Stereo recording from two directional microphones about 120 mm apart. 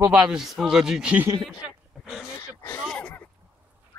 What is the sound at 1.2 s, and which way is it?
Speech, 25° right (ahead or behind).